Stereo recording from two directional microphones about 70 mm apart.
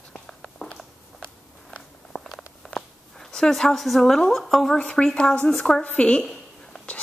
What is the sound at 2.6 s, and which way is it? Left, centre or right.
A woman's voice, centre.